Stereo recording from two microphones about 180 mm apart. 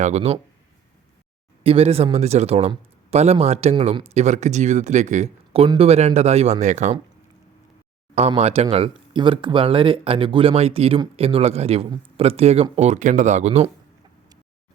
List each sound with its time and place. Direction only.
0.0 s a man's voice: 35° right (ahead or behind)
1.6 s a man's voice: 35° right (ahead or behind)
8.4 s a man's voice: 35° right (ahead or behind)